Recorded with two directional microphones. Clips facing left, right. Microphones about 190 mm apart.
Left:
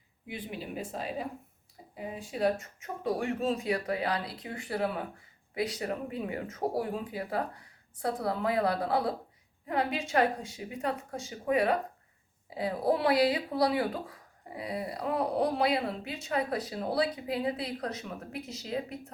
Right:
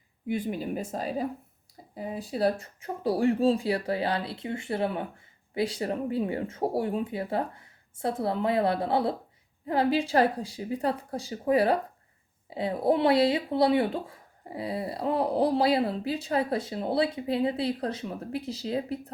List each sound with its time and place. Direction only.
0.3 s speech: 45° right (ahead or behind)